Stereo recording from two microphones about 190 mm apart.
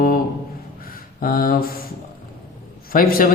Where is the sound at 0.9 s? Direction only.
50° left (ahead or behind).